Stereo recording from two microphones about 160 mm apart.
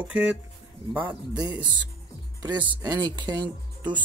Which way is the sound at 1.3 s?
30° right (ahead or behind).